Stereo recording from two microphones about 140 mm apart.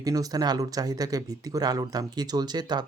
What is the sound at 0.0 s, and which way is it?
Speech, 25° right (ahead or behind).